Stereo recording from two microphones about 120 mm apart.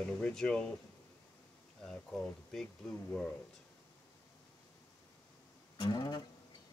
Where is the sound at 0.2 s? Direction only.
5° left (ahead or behind).